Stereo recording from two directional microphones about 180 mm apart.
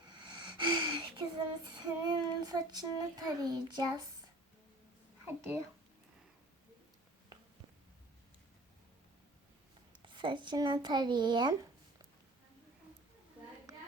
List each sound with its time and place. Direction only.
0.1 s a sound: 25° right (ahead or behind)
5.2 s a child's voice: 10° right (ahead or behind)
10.0 s speech: 25° right (ahead or behind)